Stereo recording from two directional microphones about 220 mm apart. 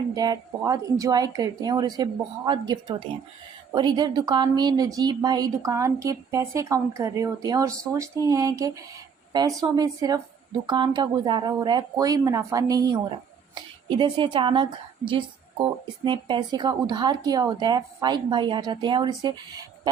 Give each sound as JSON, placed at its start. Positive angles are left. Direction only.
{"t": 0.1, "sound": "a woman's voice", "side_deg": -15}